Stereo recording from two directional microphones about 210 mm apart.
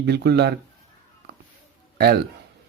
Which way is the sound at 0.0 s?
55° right (ahead or behind).